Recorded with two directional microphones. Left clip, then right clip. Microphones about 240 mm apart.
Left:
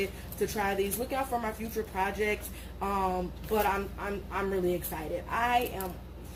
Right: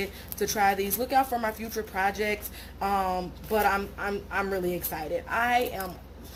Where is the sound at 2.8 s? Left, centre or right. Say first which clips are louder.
Right 4 dB; right.